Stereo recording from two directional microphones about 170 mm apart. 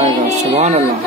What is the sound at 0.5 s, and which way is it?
Speech, 35° right (ahead or behind).